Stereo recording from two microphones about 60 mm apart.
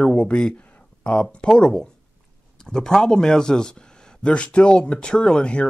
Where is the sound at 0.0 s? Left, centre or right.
Centre.